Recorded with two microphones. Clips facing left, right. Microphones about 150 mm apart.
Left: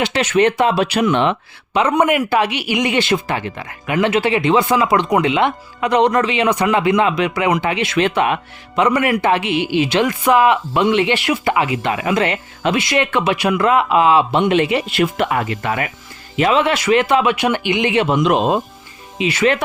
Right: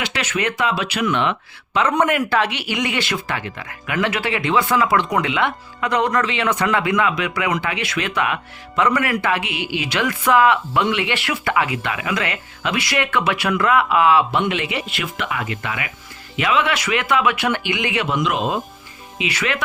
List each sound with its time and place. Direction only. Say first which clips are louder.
0.0 s speech: left 8 dB; 30° left (ahead or behind)
1.7 s speech: left 3 dB; 15° left (ahead or behind)
14.4 s speech: left 8 dB; 40° left (ahead or behind)
18.1 s speech: left 4 dB; 40° left (ahead or behind)